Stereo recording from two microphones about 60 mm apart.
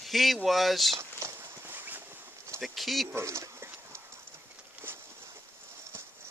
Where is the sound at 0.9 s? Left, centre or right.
Right.